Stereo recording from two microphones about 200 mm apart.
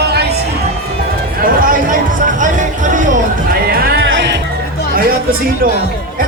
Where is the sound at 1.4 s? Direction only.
45° right (ahead or behind).